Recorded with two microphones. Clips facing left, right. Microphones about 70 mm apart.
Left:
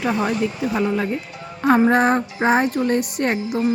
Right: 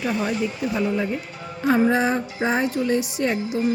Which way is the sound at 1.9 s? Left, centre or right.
Left.